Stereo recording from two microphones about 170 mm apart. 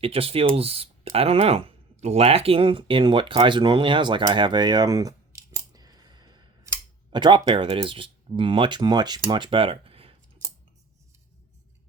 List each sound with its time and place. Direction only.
0.0 s speech: 35° right (ahead or behind)